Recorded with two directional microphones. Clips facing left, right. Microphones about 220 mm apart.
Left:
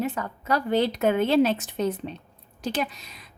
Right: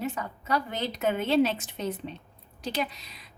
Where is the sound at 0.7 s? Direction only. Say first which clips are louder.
Left 7 dB; 65° left (ahead or behind).